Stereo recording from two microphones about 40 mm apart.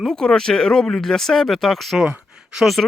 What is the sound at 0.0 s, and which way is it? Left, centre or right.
Speech, centre.